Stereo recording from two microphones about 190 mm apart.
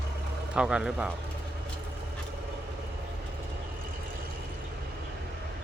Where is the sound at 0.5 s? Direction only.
5° right (ahead or behind).